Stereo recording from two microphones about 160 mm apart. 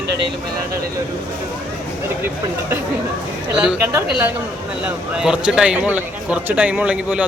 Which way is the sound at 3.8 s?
15° right (ahead or behind).